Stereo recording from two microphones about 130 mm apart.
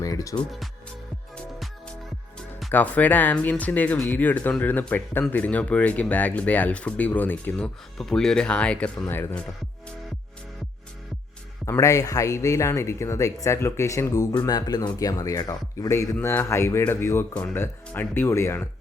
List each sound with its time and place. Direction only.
0.0 s music: 25° left (ahead or behind)
2.7 s speech: 10° left (ahead or behind)
7.9 s speech: 5° left (ahead or behind)
11.6 s speech: 25° left (ahead or behind)